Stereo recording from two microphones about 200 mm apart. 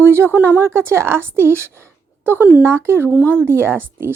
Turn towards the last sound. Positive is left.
turn(degrees=-10)  # may be behind; listen again after turning